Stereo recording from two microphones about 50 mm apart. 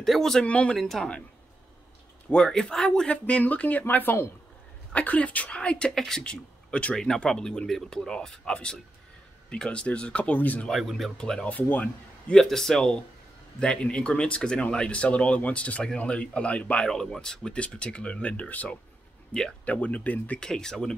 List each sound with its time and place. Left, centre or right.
0.0 s speech: centre
0.5 s speech: left
0.7 s speech: centre
2.2 s speech: centre; by 4.2 s left
4.9 s speech: left
5.9 s speech: centre
6.2 s speech: left
7.0 s speech: centre; by 10.7 s left
10.7 s speech: centre
11.1 s speech: centre
11.5 s speech: left
12.4 s speech: centre; by 16.8 s left
16.8 s speech: centre; by 20.3 s left
20.3 s speech: centre